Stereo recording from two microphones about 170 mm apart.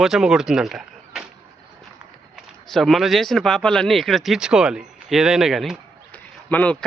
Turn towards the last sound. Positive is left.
turn(degrees=10)  # may be behind; listen again after turning